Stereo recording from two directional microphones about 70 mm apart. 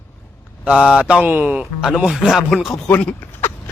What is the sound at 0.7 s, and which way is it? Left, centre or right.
Speech, centre.